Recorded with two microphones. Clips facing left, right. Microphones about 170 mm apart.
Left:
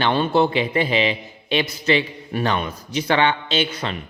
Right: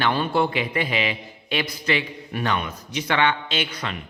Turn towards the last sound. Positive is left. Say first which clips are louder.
# left 5 dB
turn(degrees=25)  # may be behind; listen again after turning